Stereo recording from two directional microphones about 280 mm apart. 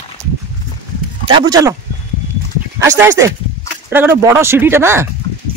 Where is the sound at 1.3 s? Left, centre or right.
Centre.